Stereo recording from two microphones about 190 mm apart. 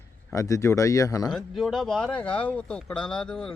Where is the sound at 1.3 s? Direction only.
Centre (ahead or behind).